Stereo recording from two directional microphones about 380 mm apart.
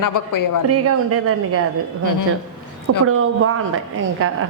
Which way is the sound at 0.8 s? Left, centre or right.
Right.